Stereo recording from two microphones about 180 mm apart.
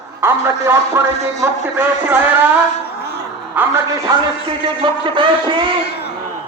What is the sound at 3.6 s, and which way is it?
Speech, 10° right (ahead or behind).